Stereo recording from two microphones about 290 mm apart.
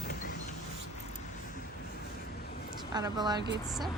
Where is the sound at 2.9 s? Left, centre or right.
Centre.